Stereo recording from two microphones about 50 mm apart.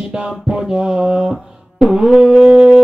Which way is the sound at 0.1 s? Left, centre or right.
Centre.